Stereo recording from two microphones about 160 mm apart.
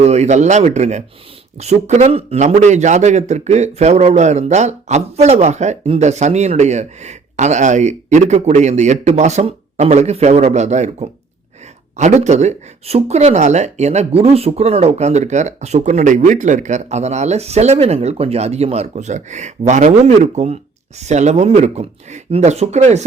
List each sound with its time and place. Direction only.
0.0 s a man's voice: 45° right (ahead or behind)